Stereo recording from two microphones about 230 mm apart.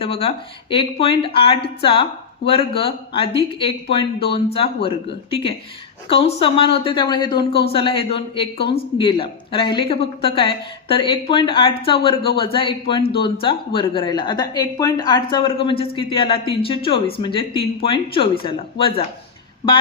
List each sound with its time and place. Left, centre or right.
0.0 s speech: left